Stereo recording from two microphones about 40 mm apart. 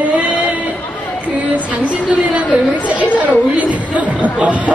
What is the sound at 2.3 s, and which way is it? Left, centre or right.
Speech, right.